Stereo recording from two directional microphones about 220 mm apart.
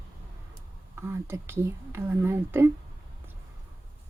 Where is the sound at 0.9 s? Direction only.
10° right (ahead or behind).